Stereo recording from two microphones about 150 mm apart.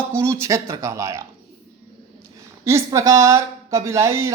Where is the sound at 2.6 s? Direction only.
20° right (ahead or behind).